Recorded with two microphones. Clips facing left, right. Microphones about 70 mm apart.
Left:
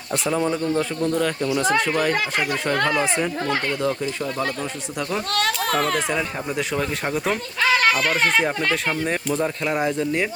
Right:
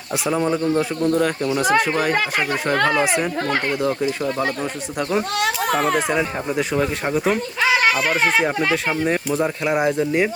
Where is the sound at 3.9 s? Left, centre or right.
Centre.